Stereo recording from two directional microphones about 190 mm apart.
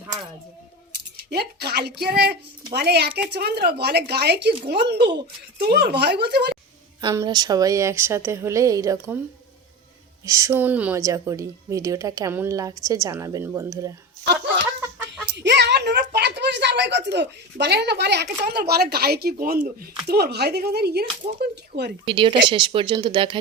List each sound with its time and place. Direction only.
1.1 s speech: 55° right (ahead or behind)
7.0 s a woman's voice: 20° right (ahead or behind)
10.2 s a woman's voice: 15° right (ahead or behind)
15.4 s a woman's voice: 60° right (ahead or behind)
22.0 s speech: 25° right (ahead or behind)